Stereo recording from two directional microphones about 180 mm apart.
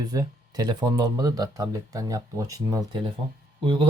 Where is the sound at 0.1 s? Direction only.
20° right (ahead or behind).